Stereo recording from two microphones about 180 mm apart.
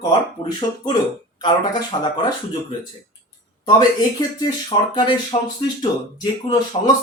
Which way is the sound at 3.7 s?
20° left (ahead or behind).